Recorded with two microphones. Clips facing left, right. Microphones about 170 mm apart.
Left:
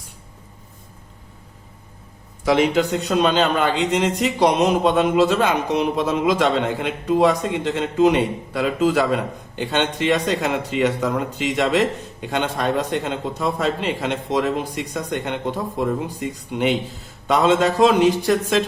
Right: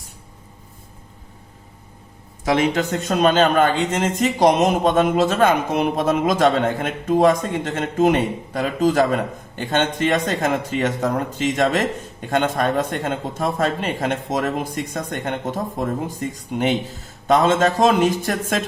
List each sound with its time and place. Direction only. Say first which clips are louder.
2.7 s a man's voice: left 2 dB; 45° right (ahead or behind)